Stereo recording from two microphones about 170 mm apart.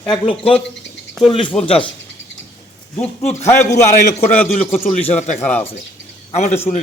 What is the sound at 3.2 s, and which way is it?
Speech, 40° left (ahead or behind).